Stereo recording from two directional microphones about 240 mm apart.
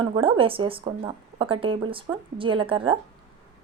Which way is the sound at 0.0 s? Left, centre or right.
Right.